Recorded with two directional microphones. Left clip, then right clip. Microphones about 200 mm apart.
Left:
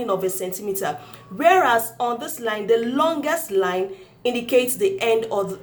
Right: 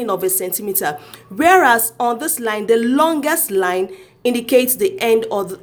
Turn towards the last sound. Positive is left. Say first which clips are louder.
# right 4 dB
turn(degrees=-40)  # may be behind; listen again after turning